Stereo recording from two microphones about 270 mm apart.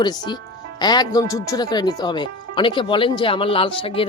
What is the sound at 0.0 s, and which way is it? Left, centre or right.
Speech, centre.